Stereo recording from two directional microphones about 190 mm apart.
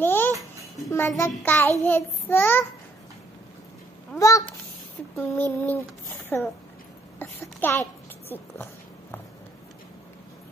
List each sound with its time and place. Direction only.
0.0 s babbling: 10° left (ahead or behind)
0.8 s child singing: 15° left (ahead or behind)
4.2 s child singing: 15° left (ahead or behind)
7.2 s a sound: 10° left (ahead or behind)
8.3 s child singing: 10° left (ahead or behind)